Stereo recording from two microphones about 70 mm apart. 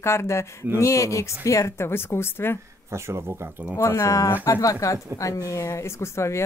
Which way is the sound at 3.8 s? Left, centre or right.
Left.